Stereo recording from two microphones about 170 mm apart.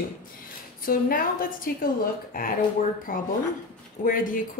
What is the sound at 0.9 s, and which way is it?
A woman's voice, 55° left (ahead or behind).